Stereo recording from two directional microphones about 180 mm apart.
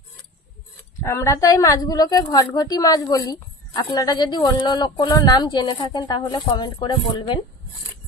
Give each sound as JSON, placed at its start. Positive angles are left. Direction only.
{"t": 1.0, "sound": "a woman's voice", "side_deg": 15}